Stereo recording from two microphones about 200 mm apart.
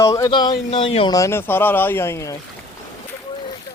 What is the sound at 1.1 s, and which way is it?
Speech, 15° left (ahead or behind).